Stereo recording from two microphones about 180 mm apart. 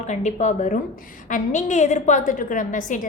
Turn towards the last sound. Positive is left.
turn(degrees=45)  # may be behind; listen again after turning